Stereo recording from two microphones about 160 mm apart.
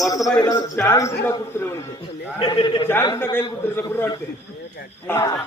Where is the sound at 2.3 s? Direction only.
30° left (ahead or behind).